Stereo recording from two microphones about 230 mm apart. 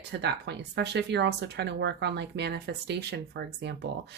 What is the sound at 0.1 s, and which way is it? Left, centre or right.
A woman's voice, right.